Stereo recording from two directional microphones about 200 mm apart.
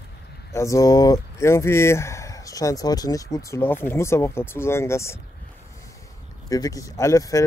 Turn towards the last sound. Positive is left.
turn(degrees=15)  # may be behind; listen again after turning